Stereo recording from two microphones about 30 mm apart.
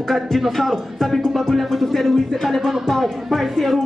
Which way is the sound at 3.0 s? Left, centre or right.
Centre.